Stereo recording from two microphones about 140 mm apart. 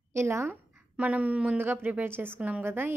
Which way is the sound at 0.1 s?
20° right (ahead or behind).